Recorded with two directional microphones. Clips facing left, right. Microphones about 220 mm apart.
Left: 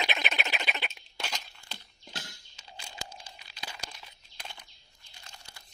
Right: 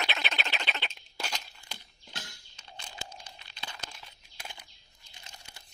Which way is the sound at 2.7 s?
10° left (ahead or behind).